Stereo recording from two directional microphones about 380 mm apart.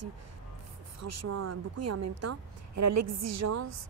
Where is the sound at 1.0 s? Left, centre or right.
Right.